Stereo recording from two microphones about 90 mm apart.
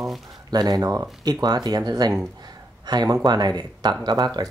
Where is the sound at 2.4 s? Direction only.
50° right (ahead or behind).